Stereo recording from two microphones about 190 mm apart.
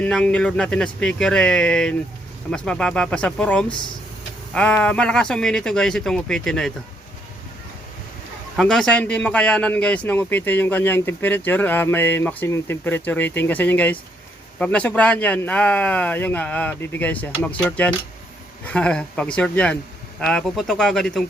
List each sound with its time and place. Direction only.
0.0 s speech: 5° left (ahead or behind)
8.5 s a man's voice: 5° left (ahead or behind)